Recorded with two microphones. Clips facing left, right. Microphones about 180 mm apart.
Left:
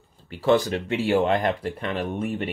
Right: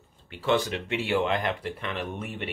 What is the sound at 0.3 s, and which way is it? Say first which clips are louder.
Speech: left 5 dB; 40° left (ahead or behind).